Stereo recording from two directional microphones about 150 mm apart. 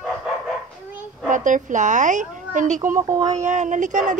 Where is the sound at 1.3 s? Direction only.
60° right (ahead or behind).